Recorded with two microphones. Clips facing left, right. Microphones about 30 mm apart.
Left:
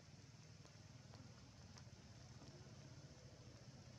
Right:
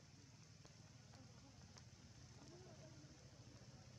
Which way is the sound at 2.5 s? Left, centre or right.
Centre.